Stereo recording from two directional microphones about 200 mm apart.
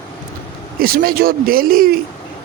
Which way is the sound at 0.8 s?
50° right (ahead or behind).